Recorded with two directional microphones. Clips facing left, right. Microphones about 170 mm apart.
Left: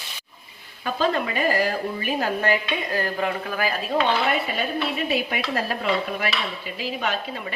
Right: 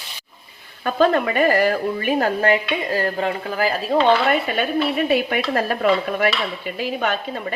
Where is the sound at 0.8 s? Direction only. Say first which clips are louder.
Right 6 dB; 60° right (ahead or behind).